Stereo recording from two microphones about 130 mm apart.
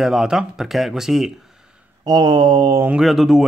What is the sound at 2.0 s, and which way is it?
Mantra, 30° right (ahead or behind).